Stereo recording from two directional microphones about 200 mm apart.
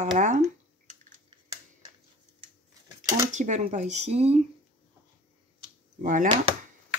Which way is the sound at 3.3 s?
35° right (ahead or behind).